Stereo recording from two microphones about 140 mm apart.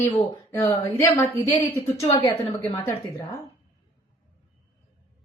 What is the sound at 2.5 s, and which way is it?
Speech, 20° left (ahead or behind).